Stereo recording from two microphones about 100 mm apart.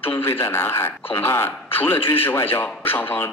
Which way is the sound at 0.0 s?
20° left (ahead or behind).